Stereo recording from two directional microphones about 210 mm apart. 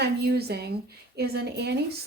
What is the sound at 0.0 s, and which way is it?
A woman's voice, 50° right (ahead or behind).